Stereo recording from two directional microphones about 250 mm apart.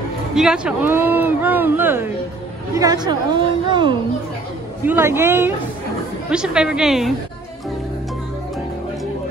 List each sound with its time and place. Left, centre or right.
0.3 s a woman's voice: centre